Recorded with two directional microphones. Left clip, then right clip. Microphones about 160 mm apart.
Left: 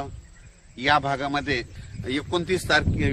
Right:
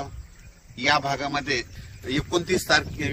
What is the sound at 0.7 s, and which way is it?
A man's voice, 70° right (ahead or behind).